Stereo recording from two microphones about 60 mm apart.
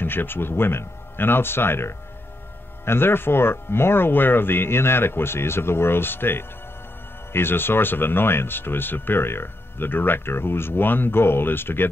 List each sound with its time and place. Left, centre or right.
0.0 s speech: left